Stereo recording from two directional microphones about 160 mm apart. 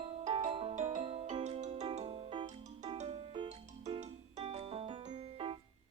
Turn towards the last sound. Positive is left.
turn(degrees=-40)  # may be behind; listen again after turning